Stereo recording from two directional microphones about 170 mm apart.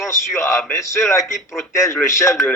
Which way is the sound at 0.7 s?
15° left (ahead or behind).